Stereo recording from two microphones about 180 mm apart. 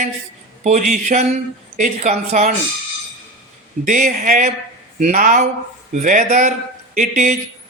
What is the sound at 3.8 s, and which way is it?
Speech, 45° right (ahead or behind).